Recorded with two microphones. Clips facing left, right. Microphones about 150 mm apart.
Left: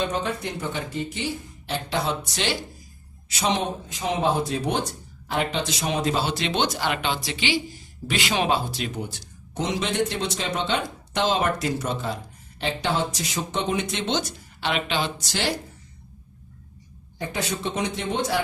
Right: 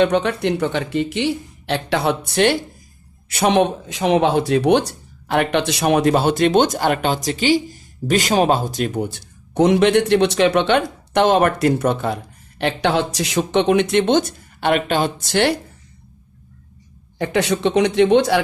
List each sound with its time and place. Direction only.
0.0 s speech: 75° right (ahead or behind)
17.2 s speech: 75° right (ahead or behind)